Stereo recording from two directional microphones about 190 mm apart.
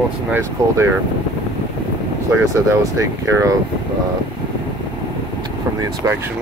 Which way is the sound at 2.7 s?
15° right (ahead or behind).